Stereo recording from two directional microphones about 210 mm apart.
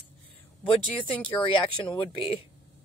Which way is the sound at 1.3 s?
25° left (ahead or behind).